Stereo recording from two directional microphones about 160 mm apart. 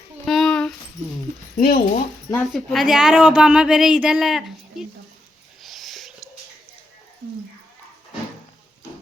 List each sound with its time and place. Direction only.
0.3 s a sound: 5° left (ahead or behind)
1.5 s speech: 55° left (ahead or behind)
2.3 s a woman's voice: 5° left (ahead or behind)
5.6 s whispering: centre (ahead or behind)